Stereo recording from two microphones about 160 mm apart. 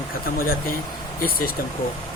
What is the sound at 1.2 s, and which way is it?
Speech, 65° left (ahead or behind).